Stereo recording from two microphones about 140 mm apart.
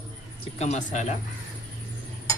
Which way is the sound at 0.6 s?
55° left (ahead or behind).